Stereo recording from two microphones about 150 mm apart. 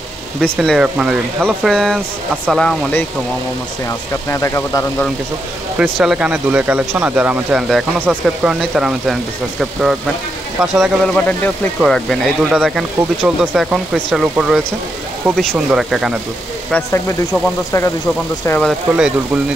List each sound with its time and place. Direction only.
0.4 s speech: centre (ahead or behind)
4.3 s speech: 20° left (ahead or behind)
5.8 s speech: 5° right (ahead or behind)
11.1 s speech: 10° left (ahead or behind)
16.7 s speech: 15° left (ahead or behind)
18.6 s speech: centre (ahead or behind)